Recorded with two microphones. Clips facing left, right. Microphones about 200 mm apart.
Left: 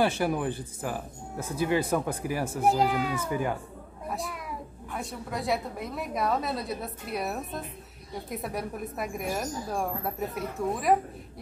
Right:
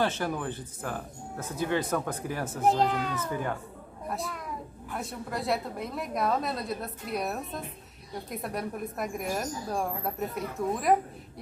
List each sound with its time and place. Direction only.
0.0 s speech: 10° left (ahead or behind)